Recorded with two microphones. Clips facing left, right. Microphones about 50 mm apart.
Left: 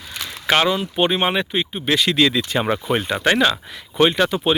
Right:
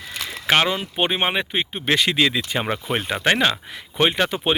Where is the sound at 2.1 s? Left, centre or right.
Centre.